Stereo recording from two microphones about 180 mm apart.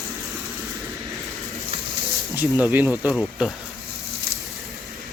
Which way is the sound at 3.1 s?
Centre (ahead or behind).